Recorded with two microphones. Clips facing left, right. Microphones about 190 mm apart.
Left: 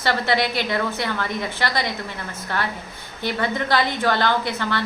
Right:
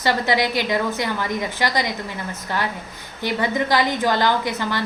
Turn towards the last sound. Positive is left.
turn(degrees=-15)  # may be behind; listen again after turning